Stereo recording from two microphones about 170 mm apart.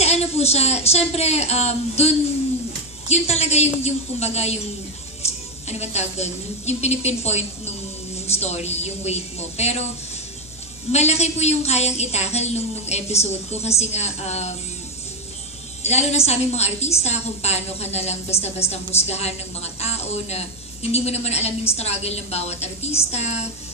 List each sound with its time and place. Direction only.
0.0 s a woman's voice: 40° left (ahead or behind)
5.7 s a woman's voice: 40° left (ahead or behind)
10.9 s a woman's voice: 40° left (ahead or behind)
15.8 s a woman's voice: 40° left (ahead or behind)